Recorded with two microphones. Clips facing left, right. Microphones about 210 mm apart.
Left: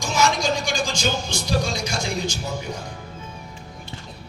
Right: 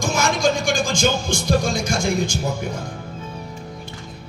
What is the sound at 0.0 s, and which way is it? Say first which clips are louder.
Speech: right 2 dB; 50° right (ahead or behind).